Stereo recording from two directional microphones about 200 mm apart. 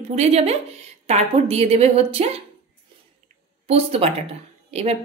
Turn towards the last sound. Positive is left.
turn(degrees=-30)  # may be behind; listen again after turning